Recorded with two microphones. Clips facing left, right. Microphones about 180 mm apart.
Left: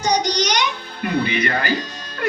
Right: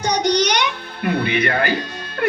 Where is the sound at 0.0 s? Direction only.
60° right (ahead or behind).